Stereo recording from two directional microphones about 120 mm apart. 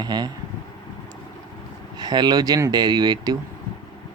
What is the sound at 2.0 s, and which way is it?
Speech, 35° right (ahead or behind).